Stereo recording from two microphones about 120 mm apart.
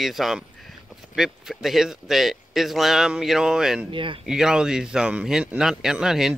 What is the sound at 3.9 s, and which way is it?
Speech, 45° right (ahead or behind).